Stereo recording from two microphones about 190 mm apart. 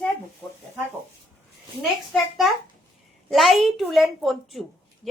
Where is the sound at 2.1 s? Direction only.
Centre (ahead or behind).